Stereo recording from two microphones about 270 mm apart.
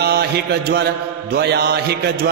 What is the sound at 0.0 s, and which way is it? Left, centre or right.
Speech, right.